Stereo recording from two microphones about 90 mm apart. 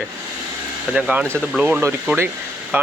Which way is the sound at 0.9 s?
15° right (ahead or behind).